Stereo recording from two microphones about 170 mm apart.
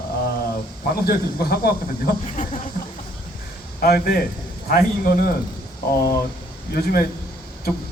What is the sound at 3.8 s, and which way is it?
A man's voice, 65° left (ahead or behind).